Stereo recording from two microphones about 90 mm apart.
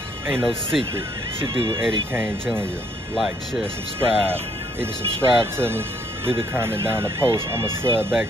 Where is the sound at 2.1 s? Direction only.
25° right (ahead or behind).